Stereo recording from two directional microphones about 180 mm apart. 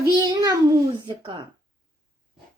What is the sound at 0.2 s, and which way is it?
A child's voice, 20° right (ahead or behind).